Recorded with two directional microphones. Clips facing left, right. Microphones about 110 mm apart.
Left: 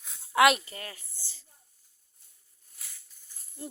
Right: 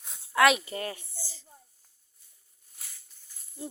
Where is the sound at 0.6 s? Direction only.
25° right (ahead or behind).